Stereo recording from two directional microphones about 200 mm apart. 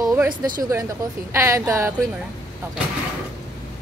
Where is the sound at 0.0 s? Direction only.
15° right (ahead or behind).